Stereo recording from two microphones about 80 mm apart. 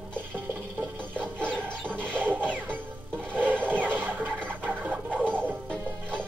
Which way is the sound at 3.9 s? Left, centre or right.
Right.